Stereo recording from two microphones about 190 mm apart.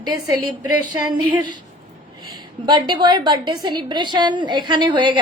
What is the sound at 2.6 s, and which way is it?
A woman's voice, 25° right (ahead or behind).